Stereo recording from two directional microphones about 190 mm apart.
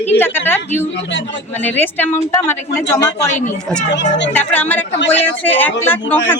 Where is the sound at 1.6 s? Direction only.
10° left (ahead or behind).